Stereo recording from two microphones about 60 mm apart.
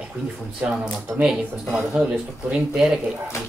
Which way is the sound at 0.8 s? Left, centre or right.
Centre.